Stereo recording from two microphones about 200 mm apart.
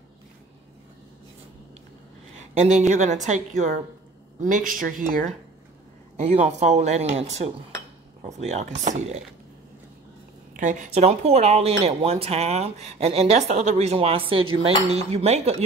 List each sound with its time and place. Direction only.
2.5 s speech: 35° right (ahead or behind)
10.5 s speech: 40° right (ahead or behind)